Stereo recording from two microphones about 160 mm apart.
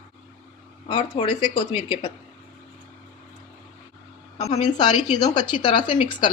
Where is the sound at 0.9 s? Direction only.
35° left (ahead or behind).